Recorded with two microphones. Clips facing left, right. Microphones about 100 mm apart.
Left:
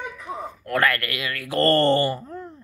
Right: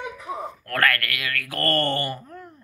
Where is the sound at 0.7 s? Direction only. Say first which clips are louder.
Left 1 dB; 20° left (ahead or behind).